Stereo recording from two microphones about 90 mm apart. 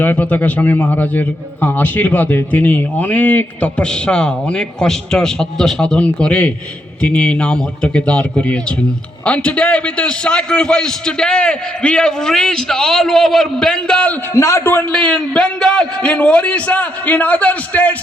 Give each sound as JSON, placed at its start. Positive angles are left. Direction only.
{"t": 0.0, "sound": "a man's voice", "side_deg": 20}
{"t": 14.3, "sound": "a man's voice", "side_deg": 30}